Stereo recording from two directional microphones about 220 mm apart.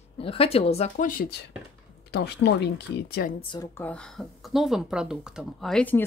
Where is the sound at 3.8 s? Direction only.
5° left (ahead or behind).